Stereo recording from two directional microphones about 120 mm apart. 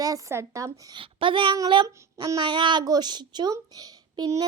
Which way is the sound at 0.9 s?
45° right (ahead or behind).